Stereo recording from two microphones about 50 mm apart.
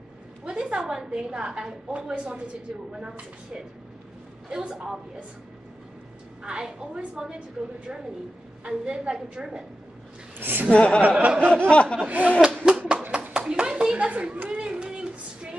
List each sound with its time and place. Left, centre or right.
0.5 s a woman's voice: right
6.4 s a woman's voice: centre
8.6 s a woman's voice: centre
10.4 s a woman's voice: right
10.7 s speech: left
11.0 s a woman's voice: right
11.7 s speech: left
12.1 s a woman's voice: right
12.6 s a sound: centre